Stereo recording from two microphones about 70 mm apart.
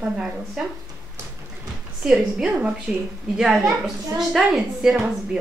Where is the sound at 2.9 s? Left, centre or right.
Centre.